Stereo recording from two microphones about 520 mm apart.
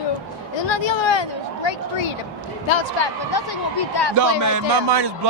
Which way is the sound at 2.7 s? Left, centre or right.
Left.